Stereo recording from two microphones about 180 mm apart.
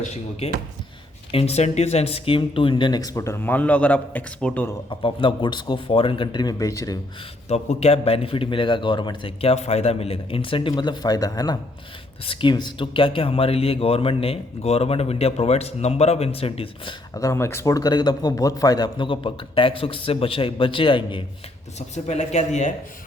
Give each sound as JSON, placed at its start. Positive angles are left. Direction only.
{"t": 1.3, "sound": "a man's voice", "side_deg": 35}
{"t": 4.9, "sound": "a man's voice", "side_deg": 25}
{"t": 7.4, "sound": "speech", "side_deg": 35}
{"t": 17.2, "sound": "a man's voice", "side_deg": 15}